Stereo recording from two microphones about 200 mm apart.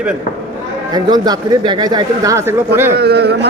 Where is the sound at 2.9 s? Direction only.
55° right (ahead or behind).